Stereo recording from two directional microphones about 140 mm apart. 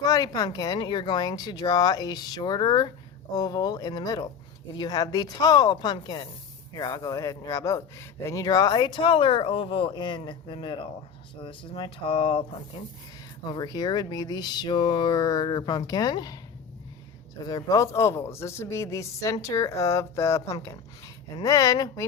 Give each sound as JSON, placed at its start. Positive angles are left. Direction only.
{"t": 0.0, "sound": "speech", "side_deg": 25}
{"t": 13.5, "sound": "speech", "side_deg": 30}
{"t": 17.4, "sound": "speech", "side_deg": 25}